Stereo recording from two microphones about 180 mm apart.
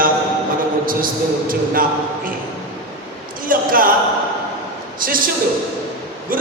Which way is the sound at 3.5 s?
50° right (ahead or behind).